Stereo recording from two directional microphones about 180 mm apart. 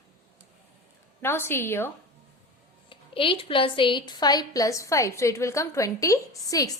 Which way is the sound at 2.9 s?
30° left (ahead or behind).